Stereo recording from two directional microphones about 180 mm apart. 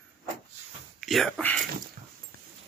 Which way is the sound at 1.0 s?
Centre (ahead or behind).